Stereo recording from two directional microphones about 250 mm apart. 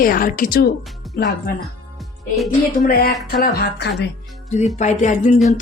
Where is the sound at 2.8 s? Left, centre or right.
Left.